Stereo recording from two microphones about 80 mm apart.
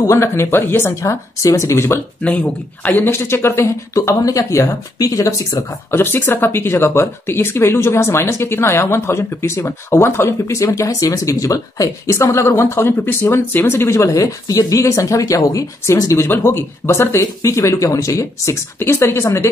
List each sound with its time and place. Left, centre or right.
0.0 s speech: left
2.2 s speech: centre; by 5.7 s left
5.9 s speech: left